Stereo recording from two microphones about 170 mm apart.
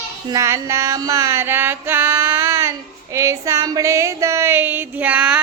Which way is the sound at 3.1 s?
15° right (ahead or behind).